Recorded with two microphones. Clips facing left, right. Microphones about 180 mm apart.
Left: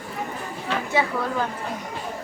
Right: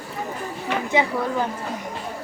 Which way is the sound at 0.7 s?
15° right (ahead or behind).